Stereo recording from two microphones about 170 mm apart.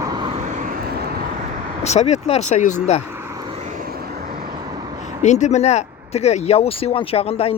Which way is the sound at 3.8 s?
65° right (ahead or behind).